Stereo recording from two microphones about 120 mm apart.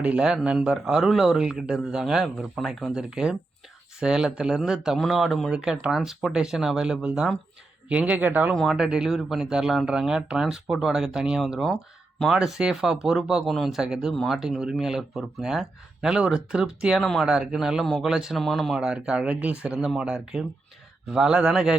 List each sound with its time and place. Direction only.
0.0 s speech: 10° right (ahead or behind)
8.4 s speech: centre (ahead or behind)